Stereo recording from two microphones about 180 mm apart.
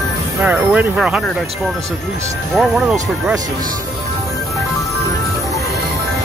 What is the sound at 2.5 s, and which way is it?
Speech, centre (ahead or behind).